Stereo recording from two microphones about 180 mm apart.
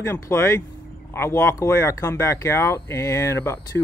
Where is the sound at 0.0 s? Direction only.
15° left (ahead or behind).